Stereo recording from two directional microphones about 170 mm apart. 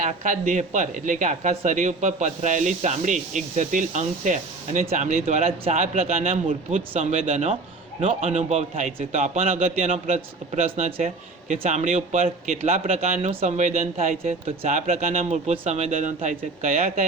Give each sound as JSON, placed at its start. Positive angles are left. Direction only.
{"t": 0.0, "sound": "a man's voice", "side_deg": -50}